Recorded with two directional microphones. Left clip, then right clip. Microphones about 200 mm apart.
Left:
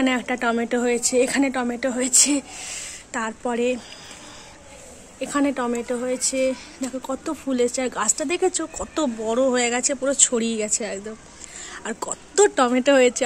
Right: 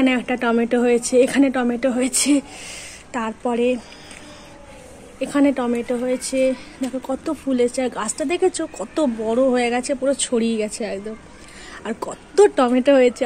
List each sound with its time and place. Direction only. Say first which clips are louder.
0.0 s speech: right 2 dB; 5° right (ahead or behind)
5.2 s a woman's voice: right 4 dB; 5° right (ahead or behind)